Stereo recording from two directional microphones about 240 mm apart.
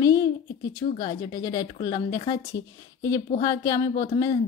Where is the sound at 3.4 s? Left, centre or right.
Centre.